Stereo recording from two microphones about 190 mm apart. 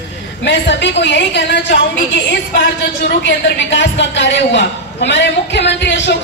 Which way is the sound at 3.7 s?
70° left (ahead or behind).